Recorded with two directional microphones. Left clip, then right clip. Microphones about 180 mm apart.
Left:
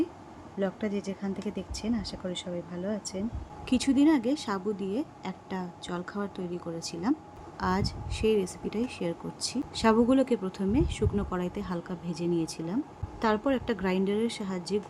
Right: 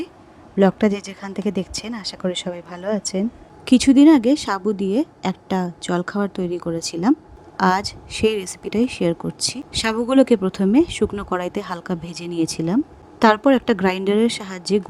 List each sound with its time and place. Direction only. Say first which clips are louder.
0.6 s speech: right 14 dB; 65° right (ahead or behind)
3.7 s a woman's voice: right 12 dB; 50° right (ahead or behind)